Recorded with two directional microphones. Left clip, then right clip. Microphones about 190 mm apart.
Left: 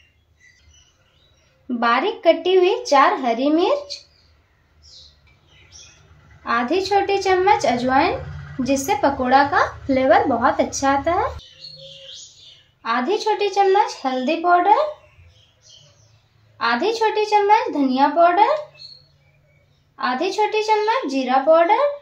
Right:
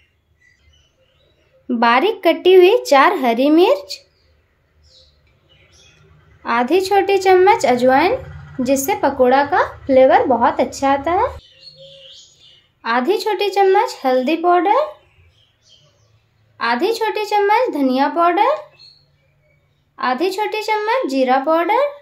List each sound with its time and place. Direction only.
1.7 s speech: 55° right (ahead or behind)
6.4 s a woman's voice: 45° right (ahead or behind)
12.8 s a woman's voice: 50° right (ahead or behind)
16.5 s a woman's voice: 50° right (ahead or behind)
20.0 s a woman's voice: 50° right (ahead or behind)